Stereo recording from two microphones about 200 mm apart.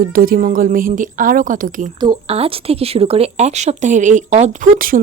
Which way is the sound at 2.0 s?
25° right (ahead or behind).